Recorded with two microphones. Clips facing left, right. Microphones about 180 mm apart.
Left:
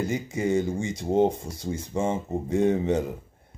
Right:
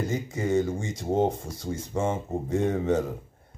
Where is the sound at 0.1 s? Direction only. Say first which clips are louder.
Left 1 dB; 15° left (ahead or behind).